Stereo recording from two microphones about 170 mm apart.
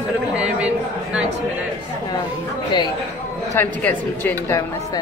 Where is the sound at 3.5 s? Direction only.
10° left (ahead or behind).